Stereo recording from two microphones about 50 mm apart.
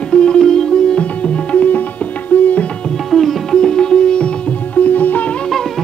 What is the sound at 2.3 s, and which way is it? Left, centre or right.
Tabla, left.